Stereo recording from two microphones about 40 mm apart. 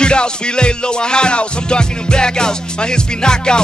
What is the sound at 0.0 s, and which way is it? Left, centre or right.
Music, left.